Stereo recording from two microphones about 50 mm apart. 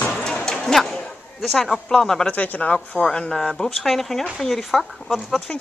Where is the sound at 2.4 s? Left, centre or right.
Left.